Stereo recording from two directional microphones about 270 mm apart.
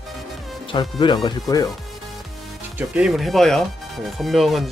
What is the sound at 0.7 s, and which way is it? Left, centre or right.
Speech, centre.